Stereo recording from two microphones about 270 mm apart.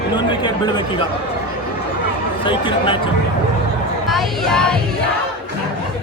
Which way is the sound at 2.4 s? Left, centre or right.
Centre.